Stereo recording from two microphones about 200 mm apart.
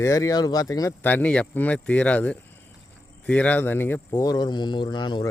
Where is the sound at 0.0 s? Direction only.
15° left (ahead or behind).